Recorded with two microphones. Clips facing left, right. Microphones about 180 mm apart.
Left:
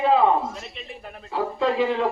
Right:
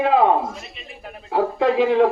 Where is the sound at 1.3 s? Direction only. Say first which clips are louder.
Right 5 dB; 60° right (ahead or behind).